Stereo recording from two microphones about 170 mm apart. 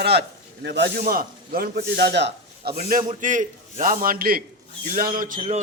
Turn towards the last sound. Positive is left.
turn(degrees=-55)  # may be behind; listen again after turning